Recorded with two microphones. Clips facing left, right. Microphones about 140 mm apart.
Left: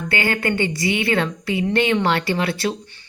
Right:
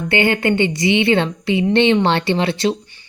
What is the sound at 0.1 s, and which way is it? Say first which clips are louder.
Speech: right 5 dB; 25° right (ahead or behind).